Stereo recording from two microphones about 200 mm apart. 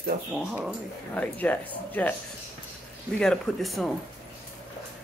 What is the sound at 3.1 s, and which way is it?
Speech, centre (ahead or behind).